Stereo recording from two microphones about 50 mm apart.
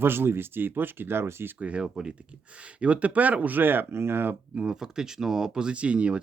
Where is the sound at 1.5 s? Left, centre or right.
Right.